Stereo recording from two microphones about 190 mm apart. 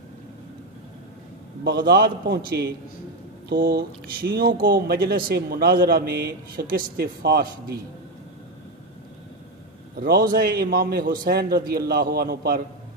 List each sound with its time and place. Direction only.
1.6 s speech: 55° right (ahead or behind)
9.9 s a man's voice: 50° right (ahead or behind)